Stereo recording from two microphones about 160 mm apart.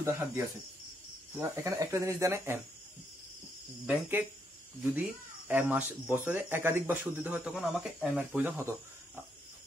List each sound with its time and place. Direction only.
0.0 s speech: 15° right (ahead or behind)
3.8 s speech: 10° right (ahead or behind)
5.5 s speech: 10° right (ahead or behind)